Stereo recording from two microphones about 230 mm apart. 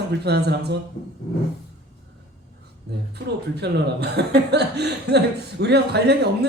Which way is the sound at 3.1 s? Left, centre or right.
Right.